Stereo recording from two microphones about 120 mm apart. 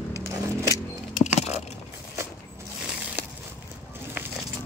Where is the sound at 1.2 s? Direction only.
70° left (ahead or behind).